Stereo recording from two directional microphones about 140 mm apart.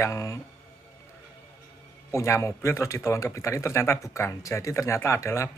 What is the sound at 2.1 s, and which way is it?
Speech, 20° left (ahead or behind).